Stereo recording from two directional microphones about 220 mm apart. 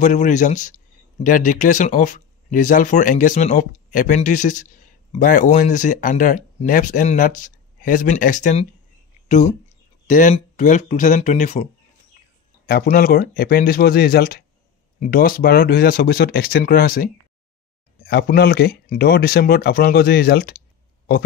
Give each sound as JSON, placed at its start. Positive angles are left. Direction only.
{"t": 0.0, "sound": "speech", "side_deg": 35}